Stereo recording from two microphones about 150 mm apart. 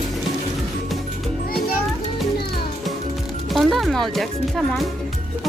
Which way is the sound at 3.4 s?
Centre (ahead or behind).